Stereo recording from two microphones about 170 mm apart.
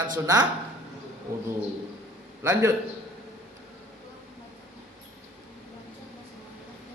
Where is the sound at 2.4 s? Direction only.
15° right (ahead or behind).